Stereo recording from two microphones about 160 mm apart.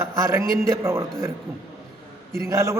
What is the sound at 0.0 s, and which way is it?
A man's voice, 15° right (ahead or behind).